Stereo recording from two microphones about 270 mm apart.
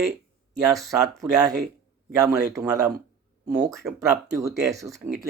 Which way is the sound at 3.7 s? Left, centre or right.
Centre.